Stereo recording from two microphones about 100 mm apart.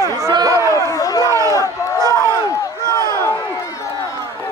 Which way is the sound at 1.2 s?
35° right (ahead or behind).